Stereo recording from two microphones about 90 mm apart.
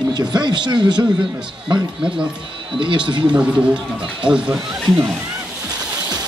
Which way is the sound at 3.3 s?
10° right (ahead or behind).